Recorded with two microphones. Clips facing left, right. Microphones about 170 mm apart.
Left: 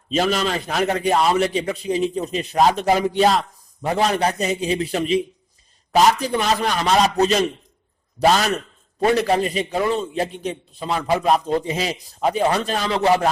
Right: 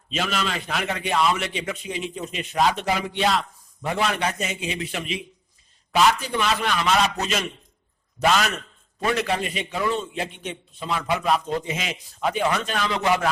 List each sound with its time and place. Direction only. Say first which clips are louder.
0.1 s a man's voice: left 6 dB; 40° left (ahead or behind)